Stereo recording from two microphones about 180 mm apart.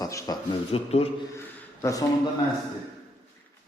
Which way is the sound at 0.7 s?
35° left (ahead or behind).